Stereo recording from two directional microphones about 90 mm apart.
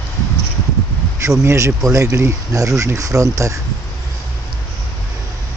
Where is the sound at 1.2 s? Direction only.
35° right (ahead or behind).